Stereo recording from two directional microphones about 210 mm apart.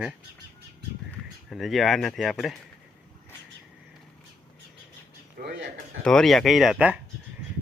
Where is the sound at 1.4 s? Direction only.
Centre (ahead or behind).